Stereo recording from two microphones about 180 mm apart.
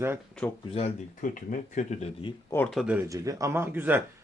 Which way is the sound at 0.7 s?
40° left (ahead or behind).